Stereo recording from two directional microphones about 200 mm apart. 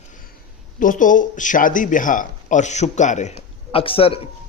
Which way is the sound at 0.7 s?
40° left (ahead or behind).